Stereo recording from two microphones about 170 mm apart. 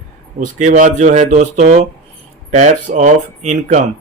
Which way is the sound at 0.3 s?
50° right (ahead or behind).